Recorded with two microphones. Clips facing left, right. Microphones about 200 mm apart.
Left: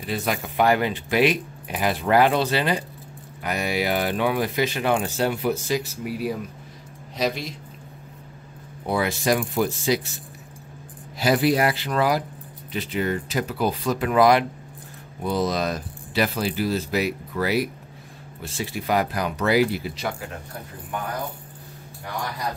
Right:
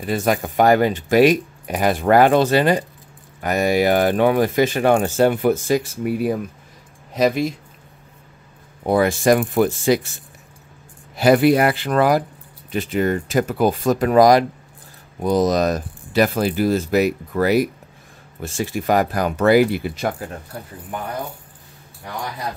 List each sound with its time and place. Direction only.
0.0 s speech: 45° right (ahead or behind)
8.8 s speech: 50° right (ahead or behind)
11.1 s speech: 55° right (ahead or behind)